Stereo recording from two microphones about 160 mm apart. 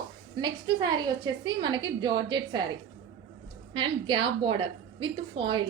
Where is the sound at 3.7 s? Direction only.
30° right (ahead or behind).